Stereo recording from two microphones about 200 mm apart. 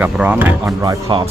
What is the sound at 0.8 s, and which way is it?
Speech, 25° right (ahead or behind).